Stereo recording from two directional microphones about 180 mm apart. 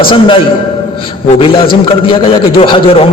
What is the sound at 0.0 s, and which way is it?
A man's voice, 30° left (ahead or behind).